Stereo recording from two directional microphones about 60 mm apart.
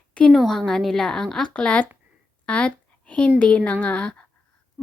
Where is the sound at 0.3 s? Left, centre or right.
Centre.